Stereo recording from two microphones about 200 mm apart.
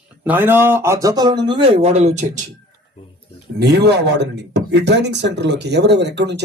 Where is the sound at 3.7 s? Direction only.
55° right (ahead or behind).